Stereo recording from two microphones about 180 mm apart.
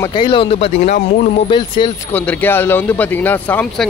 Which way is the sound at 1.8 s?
25° left (ahead or behind).